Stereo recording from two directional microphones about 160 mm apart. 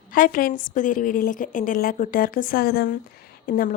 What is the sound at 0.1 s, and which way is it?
A woman's voice, 60° left (ahead or behind).